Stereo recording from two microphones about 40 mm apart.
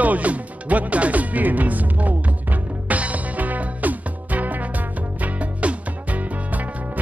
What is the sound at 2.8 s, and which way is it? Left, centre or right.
Music, right.